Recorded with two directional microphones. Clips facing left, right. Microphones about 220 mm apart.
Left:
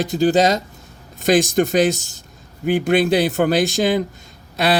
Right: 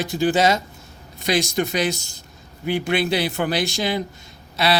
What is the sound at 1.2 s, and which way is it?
A man's voice, 50° left (ahead or behind).